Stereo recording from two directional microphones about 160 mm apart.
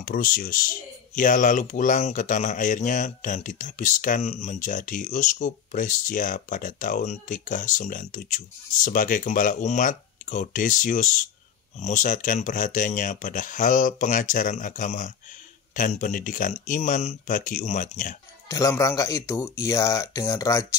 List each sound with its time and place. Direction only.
0.0 s speech: 65° left (ahead or behind)
18.5 s speech: 20° left (ahead or behind)